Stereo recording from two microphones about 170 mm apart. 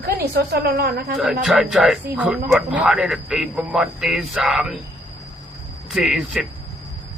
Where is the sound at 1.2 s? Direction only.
Centre (ahead or behind).